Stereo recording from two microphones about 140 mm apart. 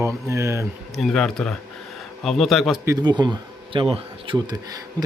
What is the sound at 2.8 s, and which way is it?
Speech, 25° right (ahead or behind).